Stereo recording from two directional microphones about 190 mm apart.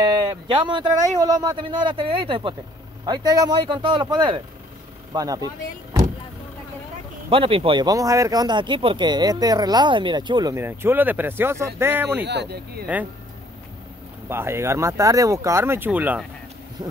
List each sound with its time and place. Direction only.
0.0 s speech: 20° right (ahead or behind)
7.2 s speech: 30° right (ahead or behind); by 12.3 s 10° right (ahead or behind)
12.3 s speech: 60° right (ahead or behind)
12.9 s speech: 10° right (ahead or behind)
14.3 s speech: 15° right (ahead or behind)